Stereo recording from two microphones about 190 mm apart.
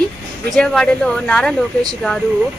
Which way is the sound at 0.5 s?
5° left (ahead or behind).